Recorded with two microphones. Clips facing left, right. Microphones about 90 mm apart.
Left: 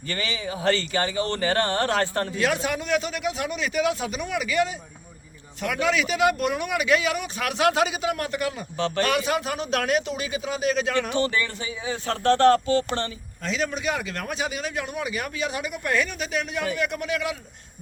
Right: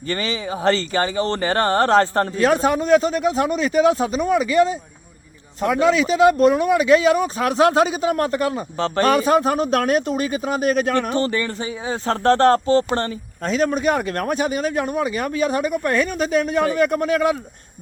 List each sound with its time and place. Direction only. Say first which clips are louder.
0.1 s speech: right 6 dB; 35° right (ahead or behind)